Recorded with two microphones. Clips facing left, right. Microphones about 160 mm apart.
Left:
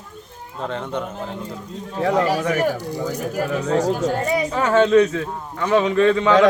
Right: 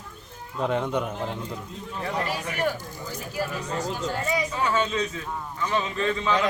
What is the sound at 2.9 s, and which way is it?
Speech, 80° left.